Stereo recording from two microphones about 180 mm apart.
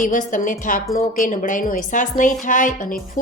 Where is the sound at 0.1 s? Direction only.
45° left (ahead or behind).